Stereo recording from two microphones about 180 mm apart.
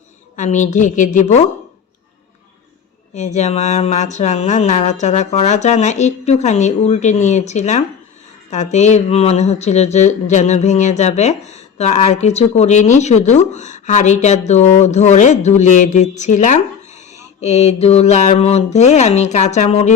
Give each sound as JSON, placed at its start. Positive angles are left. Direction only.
{"t": 0.3, "sound": "a woman's voice", "side_deg": 40}
{"t": 3.2, "sound": "speech", "side_deg": 40}